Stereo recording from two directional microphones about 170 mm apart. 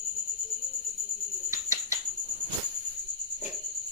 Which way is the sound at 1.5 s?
20° right (ahead or behind).